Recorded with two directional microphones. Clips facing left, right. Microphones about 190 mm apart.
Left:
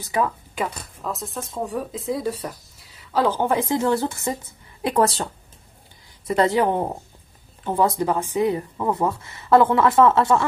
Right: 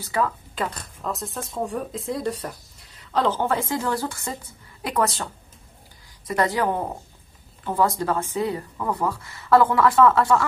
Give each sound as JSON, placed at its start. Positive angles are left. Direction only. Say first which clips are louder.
{"t": 0.0, "sound": "a woman's voice", "louder": "left 1 dB", "side_deg": 15}